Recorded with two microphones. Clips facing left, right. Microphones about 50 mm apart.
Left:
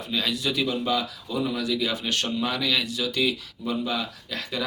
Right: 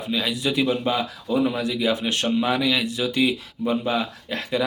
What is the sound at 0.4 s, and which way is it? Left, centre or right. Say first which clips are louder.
Speech: right 7 dB; right.